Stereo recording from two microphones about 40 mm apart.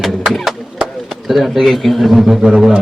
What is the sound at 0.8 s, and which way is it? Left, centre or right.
A man's voice, centre.